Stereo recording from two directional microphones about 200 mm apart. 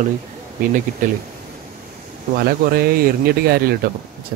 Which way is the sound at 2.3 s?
50° right (ahead or behind).